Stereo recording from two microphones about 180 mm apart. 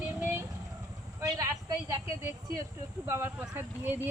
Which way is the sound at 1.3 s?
20° right (ahead or behind).